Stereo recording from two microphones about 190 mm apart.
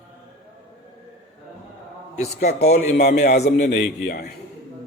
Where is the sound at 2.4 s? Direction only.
60° left (ahead or behind).